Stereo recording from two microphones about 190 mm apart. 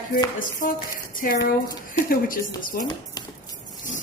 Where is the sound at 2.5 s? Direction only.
45° left (ahead or behind).